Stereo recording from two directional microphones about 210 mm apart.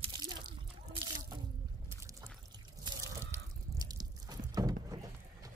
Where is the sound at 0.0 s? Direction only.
20° right (ahead or behind).